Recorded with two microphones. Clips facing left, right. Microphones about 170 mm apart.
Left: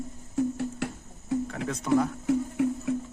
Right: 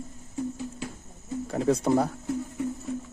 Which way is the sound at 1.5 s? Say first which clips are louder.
Right 8 dB; 35° right (ahead or behind).